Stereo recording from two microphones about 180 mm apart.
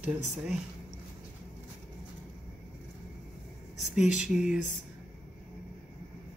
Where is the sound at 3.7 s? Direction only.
Centre (ahead or behind).